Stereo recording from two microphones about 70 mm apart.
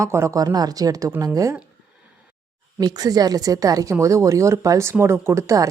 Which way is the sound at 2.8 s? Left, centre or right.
Right.